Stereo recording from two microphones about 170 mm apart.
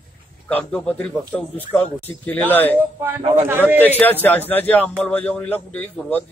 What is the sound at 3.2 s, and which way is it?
Speech, 30° right (ahead or behind).